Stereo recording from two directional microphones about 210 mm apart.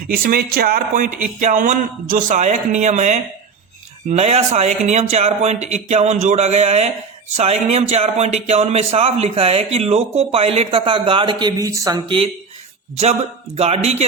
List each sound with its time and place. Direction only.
0.1 s a man's voice: 45° right (ahead or behind); by 12.3 s 25° right (ahead or behind)
13.6 s a man's voice: 30° right (ahead or behind)